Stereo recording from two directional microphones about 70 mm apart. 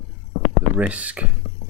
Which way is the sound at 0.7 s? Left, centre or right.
Centre.